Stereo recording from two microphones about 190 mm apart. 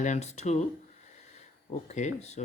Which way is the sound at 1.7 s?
35° left (ahead or behind).